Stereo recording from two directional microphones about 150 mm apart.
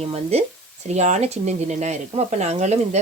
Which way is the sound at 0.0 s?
45° right (ahead or behind).